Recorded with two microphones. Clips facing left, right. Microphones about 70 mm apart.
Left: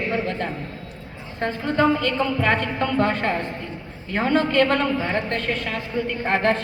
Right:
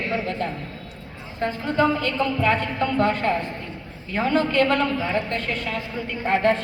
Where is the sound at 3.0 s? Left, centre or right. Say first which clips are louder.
Right 1 dB; left.